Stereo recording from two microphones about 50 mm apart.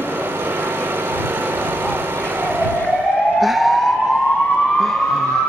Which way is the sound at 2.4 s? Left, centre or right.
Right.